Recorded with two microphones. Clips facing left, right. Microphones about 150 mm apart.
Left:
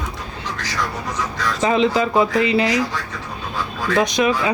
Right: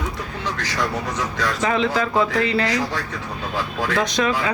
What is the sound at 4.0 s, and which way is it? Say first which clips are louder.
Speech: left 4 dB; 15° left (ahead or behind).